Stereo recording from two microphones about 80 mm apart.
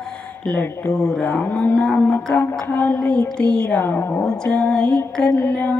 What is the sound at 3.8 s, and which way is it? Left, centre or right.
Speech, left.